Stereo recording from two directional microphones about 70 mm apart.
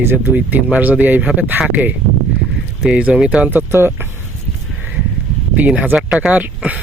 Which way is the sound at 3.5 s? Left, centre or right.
Right.